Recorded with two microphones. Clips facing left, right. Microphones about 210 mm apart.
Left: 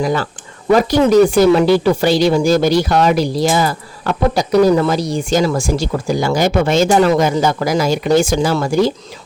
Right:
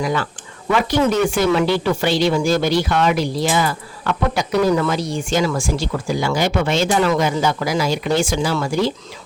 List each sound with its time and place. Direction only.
0.0 s speech: 40° left (ahead or behind)